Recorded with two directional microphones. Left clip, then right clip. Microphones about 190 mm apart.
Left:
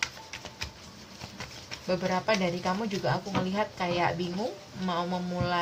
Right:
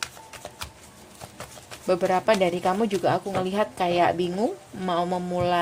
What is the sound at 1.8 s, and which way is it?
Speech, 50° right (ahead or behind).